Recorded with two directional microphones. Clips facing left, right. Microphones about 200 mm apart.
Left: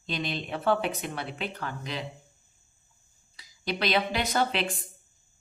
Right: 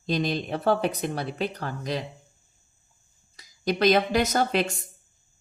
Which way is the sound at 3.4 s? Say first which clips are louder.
Right 8 dB; 45° right (ahead or behind).